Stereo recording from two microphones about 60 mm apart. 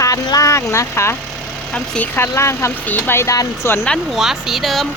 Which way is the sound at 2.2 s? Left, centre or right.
Left.